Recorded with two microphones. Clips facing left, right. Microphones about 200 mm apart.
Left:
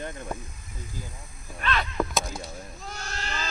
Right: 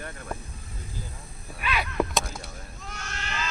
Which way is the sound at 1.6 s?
10° right (ahead or behind).